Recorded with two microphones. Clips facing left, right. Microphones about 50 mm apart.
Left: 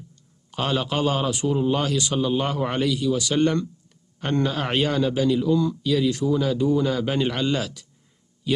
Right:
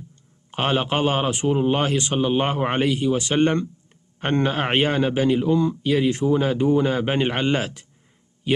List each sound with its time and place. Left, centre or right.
0.5 s a man's voice: right